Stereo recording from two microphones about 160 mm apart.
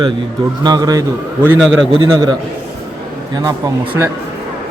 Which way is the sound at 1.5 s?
Centre (ahead or behind).